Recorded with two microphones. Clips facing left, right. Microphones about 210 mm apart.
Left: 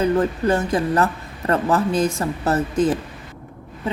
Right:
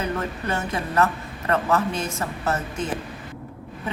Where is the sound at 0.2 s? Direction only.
30° left (ahead or behind).